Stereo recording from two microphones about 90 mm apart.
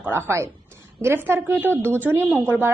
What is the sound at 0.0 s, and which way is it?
A woman's voice, 25° right (ahead or behind).